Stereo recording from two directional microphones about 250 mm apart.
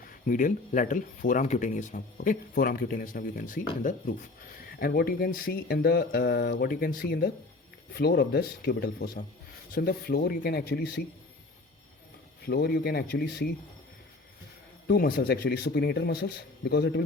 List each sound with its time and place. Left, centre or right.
0.3 s speech: left
12.5 s speech: left
14.8 s speech: left